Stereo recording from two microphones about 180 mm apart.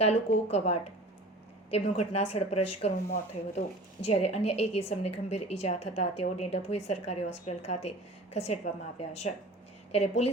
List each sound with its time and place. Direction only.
0.0 s a woman's voice: 35° left (ahead or behind)
4.0 s a woman's voice: 35° left (ahead or behind)